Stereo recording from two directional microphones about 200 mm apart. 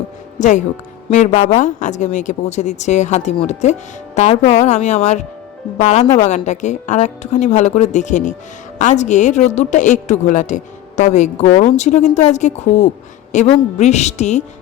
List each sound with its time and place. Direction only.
0.3 s a woman's voice: 35° left (ahead or behind)